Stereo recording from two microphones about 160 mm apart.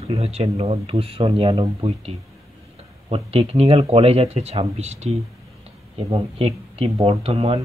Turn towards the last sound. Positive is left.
turn(degrees=-35)  # may be behind; listen again after turning